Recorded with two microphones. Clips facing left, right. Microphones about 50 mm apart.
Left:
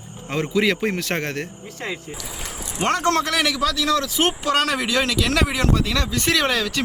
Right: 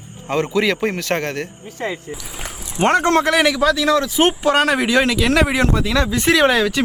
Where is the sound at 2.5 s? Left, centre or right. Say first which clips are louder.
Even; left.